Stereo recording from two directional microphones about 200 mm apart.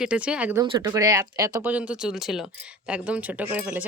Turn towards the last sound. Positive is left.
turn(degrees=-5)  # may be behind; listen again after turning